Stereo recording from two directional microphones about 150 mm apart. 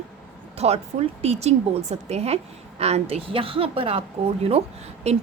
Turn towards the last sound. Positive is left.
turn(degrees=-45)  # may be behind; listen again after turning